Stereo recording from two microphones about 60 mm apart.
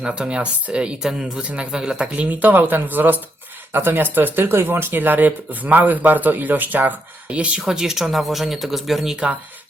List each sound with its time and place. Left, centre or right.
0.0 s speech: centre
1.7 s speech: centre
2.1 s speech: right
7.7 s speech: centre